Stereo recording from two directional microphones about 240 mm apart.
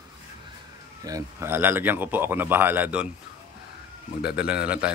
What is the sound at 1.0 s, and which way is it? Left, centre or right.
Speech, centre.